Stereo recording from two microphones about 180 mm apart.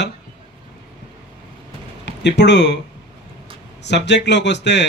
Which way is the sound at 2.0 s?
75° left (ahead or behind).